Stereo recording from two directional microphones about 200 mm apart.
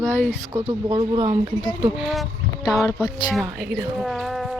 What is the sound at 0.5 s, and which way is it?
Speech, 20° right (ahead or behind).